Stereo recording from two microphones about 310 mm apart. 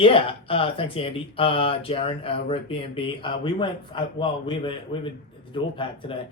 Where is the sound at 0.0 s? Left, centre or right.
Centre.